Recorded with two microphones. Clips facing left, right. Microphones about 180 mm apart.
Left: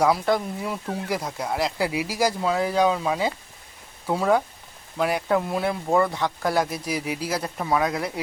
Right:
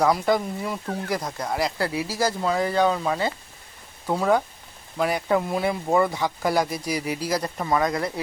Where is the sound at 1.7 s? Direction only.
10° left (ahead or behind).